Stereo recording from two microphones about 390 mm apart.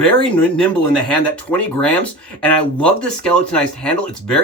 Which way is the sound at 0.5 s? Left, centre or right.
Centre.